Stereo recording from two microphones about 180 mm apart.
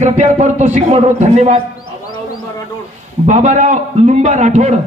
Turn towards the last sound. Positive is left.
turn(degrees=-40)  # may be behind; listen again after turning